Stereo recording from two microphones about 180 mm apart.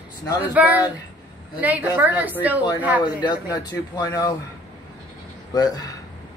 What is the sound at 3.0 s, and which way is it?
A man's voice, 25° left (ahead or behind).